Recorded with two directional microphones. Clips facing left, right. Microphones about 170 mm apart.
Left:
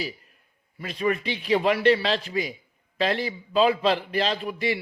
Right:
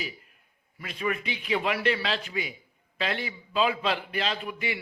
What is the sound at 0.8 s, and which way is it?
A man's voice, 35° left (ahead or behind).